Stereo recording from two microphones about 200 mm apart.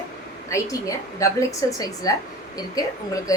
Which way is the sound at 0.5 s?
15° left (ahead or behind).